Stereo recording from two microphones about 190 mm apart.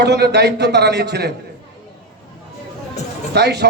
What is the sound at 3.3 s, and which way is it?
Speech, 60° right (ahead or behind).